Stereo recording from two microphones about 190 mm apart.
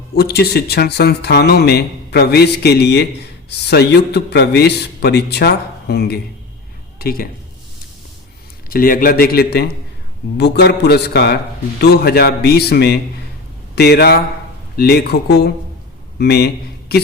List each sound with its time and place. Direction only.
0.2 s a woman's voice: 55° left (ahead or behind)
8.7 s speech: 50° left (ahead or behind)